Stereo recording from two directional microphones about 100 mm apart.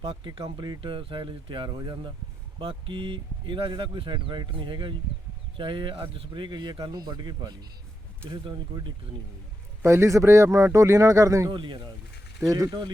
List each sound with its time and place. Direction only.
0.0 s speech: 65° right (ahead or behind)
0.5 s speech: 45° right (ahead or behind)
0.8 s speech: 60° right (ahead or behind); by 7.5 s 45° right (ahead or behind)
8.2 s speech: 10° left (ahead or behind)
9.8 s speech: 30° right (ahead or behind)
11.5 s speech: 55° right (ahead or behind)
12.4 s speech: 35° right (ahead or behind)